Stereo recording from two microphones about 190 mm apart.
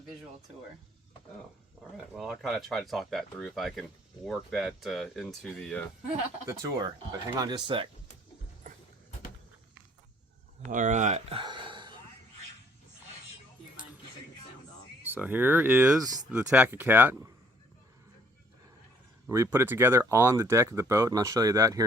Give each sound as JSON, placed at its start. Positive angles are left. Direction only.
{"t": 2.1, "sound": "speech", "side_deg": 0}
{"t": 6.5, "sound": "speech", "side_deg": -15}
{"t": 10.7, "sound": "speech", "side_deg": -40}
{"t": 15.0, "sound": "speech", "side_deg": -10}
{"t": 19.3, "sound": "speech", "side_deg": -15}